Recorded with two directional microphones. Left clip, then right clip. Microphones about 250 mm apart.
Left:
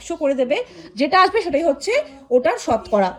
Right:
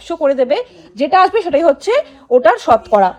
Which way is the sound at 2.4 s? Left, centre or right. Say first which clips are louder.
Right 11 dB; right.